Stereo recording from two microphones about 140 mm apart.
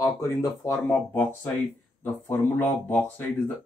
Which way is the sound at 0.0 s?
20° left (ahead or behind).